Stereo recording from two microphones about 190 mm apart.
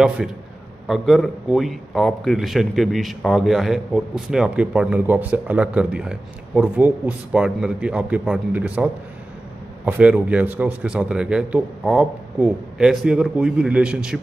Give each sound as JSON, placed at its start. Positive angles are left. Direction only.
{"t": 0.2, "sound": "a man's voice", "side_deg": 0}